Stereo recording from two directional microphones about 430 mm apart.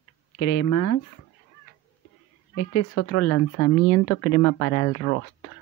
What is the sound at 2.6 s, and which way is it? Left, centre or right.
Speech, left.